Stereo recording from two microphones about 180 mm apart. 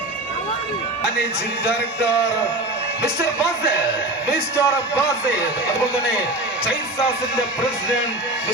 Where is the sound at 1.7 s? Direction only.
5° right (ahead or behind).